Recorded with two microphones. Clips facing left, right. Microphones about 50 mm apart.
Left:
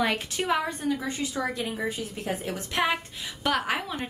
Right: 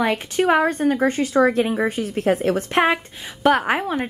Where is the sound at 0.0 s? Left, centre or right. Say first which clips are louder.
Right 7 dB; right.